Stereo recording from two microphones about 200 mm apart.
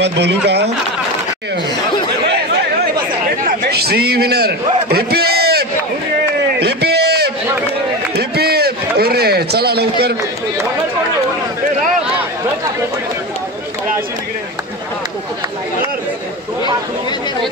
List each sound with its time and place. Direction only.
0.0 s speech: 60° right (ahead or behind)
3.4 s a man's voice: 50° right (ahead or behind)
6.6 s a sound: 55° right (ahead or behind)